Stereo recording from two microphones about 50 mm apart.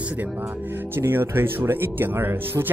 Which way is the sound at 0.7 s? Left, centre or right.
Right.